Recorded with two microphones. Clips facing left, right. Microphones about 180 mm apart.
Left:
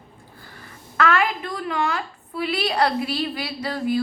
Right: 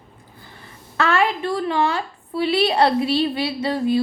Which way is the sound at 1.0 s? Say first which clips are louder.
Right 2 dB; 30° right (ahead or behind).